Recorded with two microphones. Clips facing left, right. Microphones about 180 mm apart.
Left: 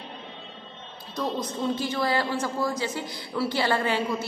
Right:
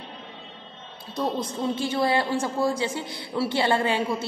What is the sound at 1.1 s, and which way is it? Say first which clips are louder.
A man's voice: right 2 dB; 30° right (ahead or behind).